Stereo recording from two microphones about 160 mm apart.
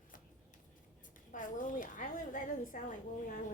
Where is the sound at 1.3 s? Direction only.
55° left (ahead or behind).